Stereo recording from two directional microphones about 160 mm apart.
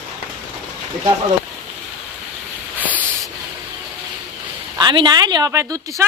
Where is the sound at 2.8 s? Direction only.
10° right (ahead or behind).